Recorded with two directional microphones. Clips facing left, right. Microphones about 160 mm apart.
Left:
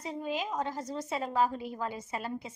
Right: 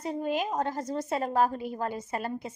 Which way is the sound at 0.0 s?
55° right (ahead or behind).